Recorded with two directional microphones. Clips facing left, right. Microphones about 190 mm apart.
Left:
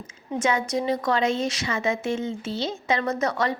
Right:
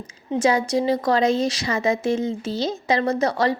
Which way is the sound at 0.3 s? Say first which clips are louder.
Right 5 dB; 35° right (ahead or behind).